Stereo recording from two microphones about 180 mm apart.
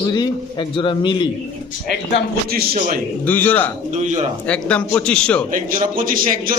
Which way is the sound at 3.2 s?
10° left (ahead or behind).